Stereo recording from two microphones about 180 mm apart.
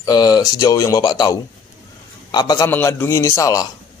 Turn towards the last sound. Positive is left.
turn(degrees=15)  # may be behind; listen again after turning